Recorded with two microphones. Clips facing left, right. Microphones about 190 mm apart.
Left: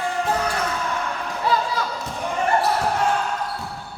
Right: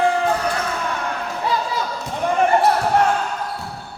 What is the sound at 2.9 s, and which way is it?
Basketball bounce, 65° right (ahead or behind).